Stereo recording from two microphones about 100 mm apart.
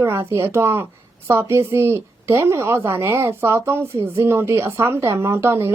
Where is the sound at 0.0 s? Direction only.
25° right (ahead or behind).